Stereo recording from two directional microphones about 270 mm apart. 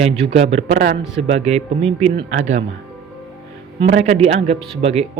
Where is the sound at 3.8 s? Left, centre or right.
Right.